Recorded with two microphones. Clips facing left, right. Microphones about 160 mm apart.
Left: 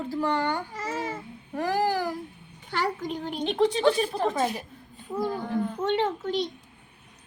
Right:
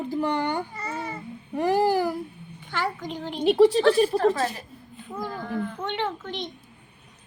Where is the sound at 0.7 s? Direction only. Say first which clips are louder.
Left 1 dB; 90° left.